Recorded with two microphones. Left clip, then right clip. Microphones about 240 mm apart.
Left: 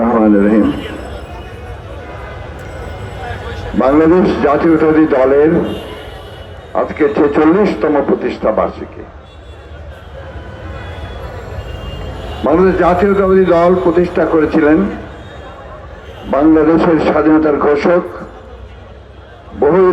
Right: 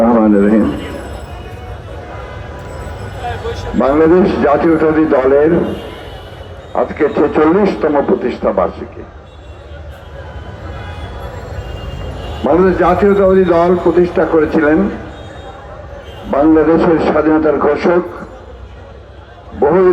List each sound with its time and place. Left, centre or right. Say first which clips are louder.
0.0 s a sound: right 1 dB; left
3.8 s a man's voice: even; left
6.7 s a man's voice: even; left
12.4 s a man's voice: even; left
16.3 s a man's voice: even; left
19.5 s a man's voice: even; left